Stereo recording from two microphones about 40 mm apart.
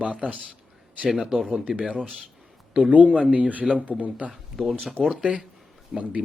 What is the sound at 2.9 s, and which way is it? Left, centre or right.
Speech, right.